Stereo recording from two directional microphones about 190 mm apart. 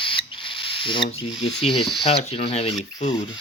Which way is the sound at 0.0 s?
25° left (ahead or behind).